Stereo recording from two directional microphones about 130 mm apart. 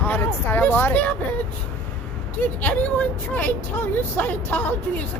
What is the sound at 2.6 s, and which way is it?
Speech, 10° left (ahead or behind).